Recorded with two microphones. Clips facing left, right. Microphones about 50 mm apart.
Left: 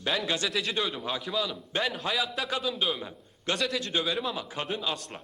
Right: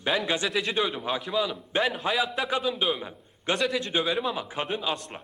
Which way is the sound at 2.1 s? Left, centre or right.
Centre.